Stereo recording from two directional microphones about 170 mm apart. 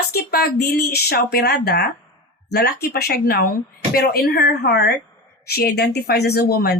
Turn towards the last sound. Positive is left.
turn(degrees=65)  # may be behind; listen again after turning